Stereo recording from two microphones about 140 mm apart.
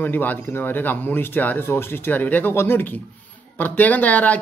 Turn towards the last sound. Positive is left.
turn(degrees=10)  # may be behind; listen again after turning